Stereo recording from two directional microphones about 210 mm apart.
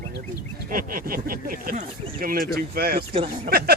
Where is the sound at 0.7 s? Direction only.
40° right (ahead or behind).